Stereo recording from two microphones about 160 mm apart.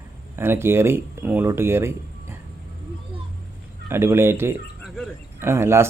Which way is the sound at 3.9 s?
15° right (ahead or behind).